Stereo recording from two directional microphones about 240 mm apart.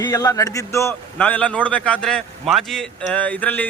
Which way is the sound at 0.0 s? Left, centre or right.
Centre.